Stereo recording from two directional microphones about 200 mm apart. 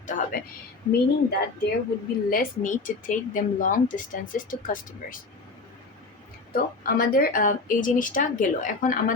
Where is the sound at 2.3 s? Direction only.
40° left (ahead or behind).